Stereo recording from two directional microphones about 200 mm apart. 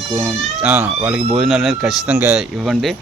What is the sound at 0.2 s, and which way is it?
Speech, 10° right (ahead or behind).